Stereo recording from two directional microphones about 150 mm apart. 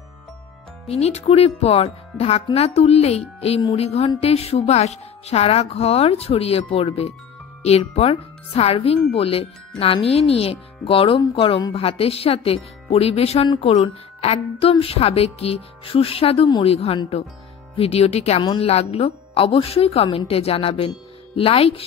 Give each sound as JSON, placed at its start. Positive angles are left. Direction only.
{"t": 0.8, "sound": "speech", "side_deg": 45}